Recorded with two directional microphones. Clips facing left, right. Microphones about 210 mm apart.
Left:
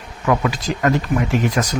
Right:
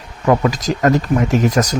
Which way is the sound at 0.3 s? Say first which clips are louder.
Right 4 dB; 40° right (ahead or behind).